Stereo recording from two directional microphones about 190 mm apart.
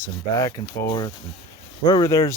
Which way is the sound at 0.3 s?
15° left (ahead or behind).